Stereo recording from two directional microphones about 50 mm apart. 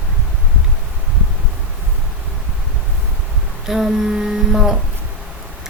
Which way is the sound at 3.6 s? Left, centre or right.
Centre.